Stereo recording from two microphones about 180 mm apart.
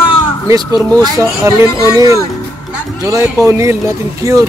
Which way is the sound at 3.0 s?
20° right (ahead or behind).